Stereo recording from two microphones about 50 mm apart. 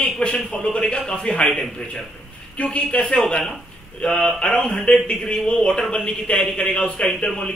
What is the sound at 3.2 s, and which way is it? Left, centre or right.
A man's voice, centre.